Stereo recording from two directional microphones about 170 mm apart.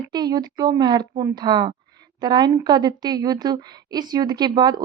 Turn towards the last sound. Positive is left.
turn(degrees=-25)  # may be behind; listen again after turning